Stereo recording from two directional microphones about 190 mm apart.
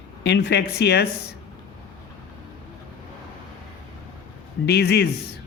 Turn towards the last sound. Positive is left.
turn(degrees=60)  # may be behind; listen again after turning